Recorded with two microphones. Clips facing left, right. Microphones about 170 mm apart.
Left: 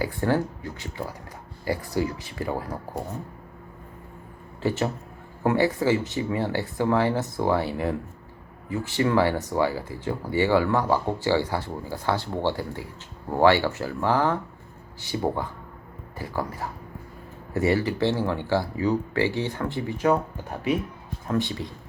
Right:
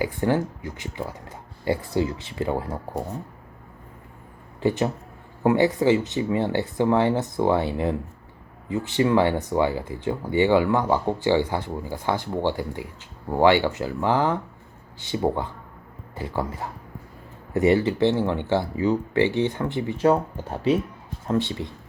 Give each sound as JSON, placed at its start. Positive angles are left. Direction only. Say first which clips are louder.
{"t": 0.0, "sound": "speech", "louder": "right 1 dB", "side_deg": -15}
{"t": 4.6, "sound": "speech", "louder": "right 3 dB", "side_deg": -15}